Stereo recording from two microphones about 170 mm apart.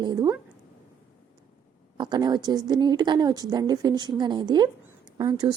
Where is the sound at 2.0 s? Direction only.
25° right (ahead or behind).